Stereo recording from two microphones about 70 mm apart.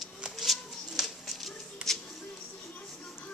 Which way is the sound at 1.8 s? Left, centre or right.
Centre.